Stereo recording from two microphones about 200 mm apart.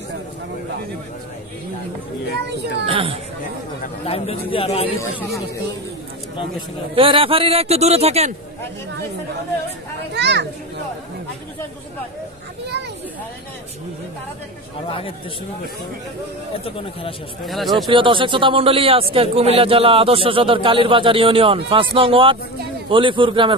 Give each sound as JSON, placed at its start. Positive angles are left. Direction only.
{"t": 2.9, "sound": "speech", "side_deg": -25}
{"t": 3.8, "sound": "a man's voice", "side_deg": 30}
{"t": 7.0, "sound": "a man's voice", "side_deg": -25}
{"t": 10.1, "sound": "a child's voice", "side_deg": -60}
{"t": 14.9, "sound": "a man's voice", "side_deg": 25}
{"t": 16.5, "sound": "a man's voice", "side_deg": 30}
{"t": 17.5, "sound": "speech", "side_deg": 0}
{"t": 17.8, "sound": "speech", "side_deg": -25}